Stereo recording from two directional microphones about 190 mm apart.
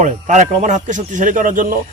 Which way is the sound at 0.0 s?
40° right (ahead or behind).